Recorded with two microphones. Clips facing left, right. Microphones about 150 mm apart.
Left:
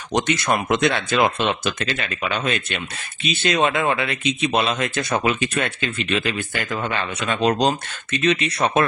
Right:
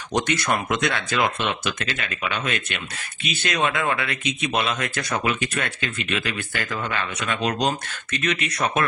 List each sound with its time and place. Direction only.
0.1 s speech: 20° left (ahead or behind)